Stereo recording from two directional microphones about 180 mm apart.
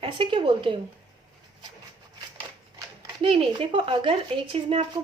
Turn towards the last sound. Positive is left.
turn(degrees=-30)  # may be behind; listen again after turning